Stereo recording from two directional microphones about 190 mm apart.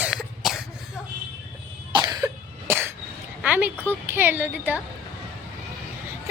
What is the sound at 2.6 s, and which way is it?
Cough, 10° right (ahead or behind).